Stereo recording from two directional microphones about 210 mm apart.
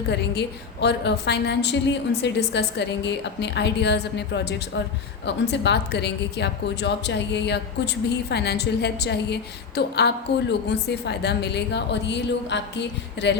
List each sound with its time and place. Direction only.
0.1 s a woman's voice: 55° left (ahead or behind)